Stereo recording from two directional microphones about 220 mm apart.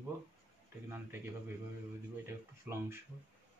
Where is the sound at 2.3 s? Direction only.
10° right (ahead or behind).